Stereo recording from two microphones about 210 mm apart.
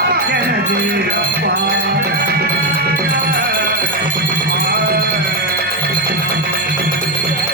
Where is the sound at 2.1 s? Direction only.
45° right (ahead or behind).